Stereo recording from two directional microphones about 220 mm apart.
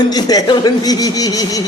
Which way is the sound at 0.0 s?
20° left (ahead or behind).